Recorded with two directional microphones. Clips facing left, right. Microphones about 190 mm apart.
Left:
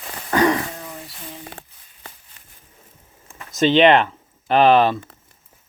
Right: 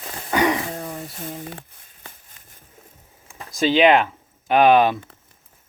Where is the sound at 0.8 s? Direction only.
45° right (ahead or behind).